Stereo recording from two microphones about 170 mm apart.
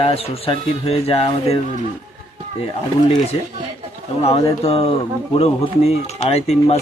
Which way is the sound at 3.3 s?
30° left (ahead or behind).